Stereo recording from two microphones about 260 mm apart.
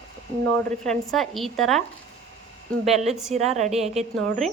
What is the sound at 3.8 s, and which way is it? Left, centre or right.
Speech, centre.